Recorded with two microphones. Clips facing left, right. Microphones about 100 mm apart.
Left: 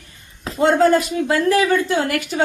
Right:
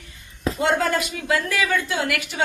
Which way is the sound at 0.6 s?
35° left (ahead or behind).